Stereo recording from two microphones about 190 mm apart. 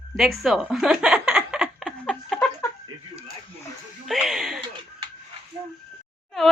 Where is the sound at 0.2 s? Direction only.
Centre (ahead or behind).